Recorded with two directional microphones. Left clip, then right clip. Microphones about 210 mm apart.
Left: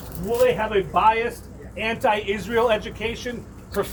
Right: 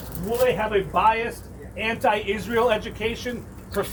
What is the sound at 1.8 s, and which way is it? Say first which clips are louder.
A man's voice: left 1 dB; 30° left (ahead or behind).